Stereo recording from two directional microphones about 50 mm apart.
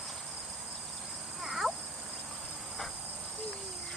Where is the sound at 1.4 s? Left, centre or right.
Centre.